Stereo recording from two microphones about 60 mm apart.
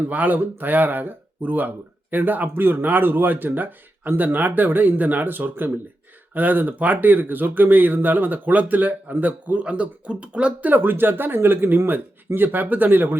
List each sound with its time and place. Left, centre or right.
0.0 s speech: right